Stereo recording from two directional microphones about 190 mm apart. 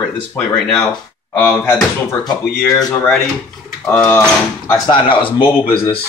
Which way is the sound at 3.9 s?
10° left (ahead or behind).